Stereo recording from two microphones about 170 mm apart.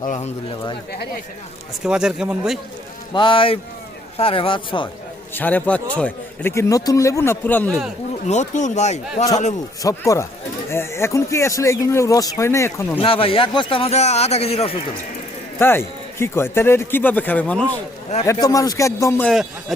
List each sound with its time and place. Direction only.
0.0 s speech: 45° left (ahead or behind)
1.8 s speech: 5° right (ahead or behind)
3.1 s a man's voice: 30° left (ahead or behind)
5.3 s a man's voice: 10° left (ahead or behind)
8.3 s a man's voice: 45° left (ahead or behind)
9.8 s a man's voice: 20° left (ahead or behind)
13.0 s a man's voice: 35° left (ahead or behind)
15.5 s a man's voice: 15° left (ahead or behind)
18.2 s speech: 25° left (ahead or behind)